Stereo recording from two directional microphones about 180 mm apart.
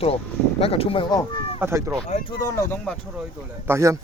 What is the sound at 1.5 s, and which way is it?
Speech, 15° right (ahead or behind).